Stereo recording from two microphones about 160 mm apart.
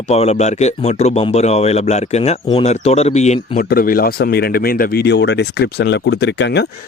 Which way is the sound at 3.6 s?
65° left (ahead or behind).